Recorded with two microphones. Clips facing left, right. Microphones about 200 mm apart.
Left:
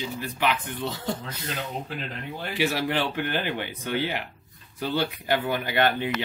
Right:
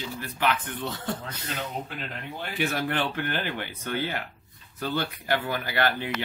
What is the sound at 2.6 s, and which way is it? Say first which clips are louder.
Speech: left 2 dB; 15° left (ahead or behind).